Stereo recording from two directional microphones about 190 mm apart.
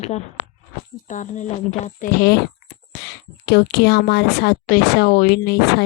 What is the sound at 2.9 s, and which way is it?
A woman's voice, 65° left (ahead or behind).